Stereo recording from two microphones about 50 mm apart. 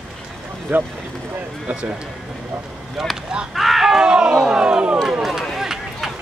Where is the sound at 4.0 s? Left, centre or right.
Centre.